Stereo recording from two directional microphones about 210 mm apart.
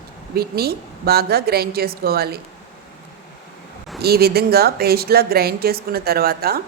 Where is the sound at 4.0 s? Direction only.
50° right (ahead or behind).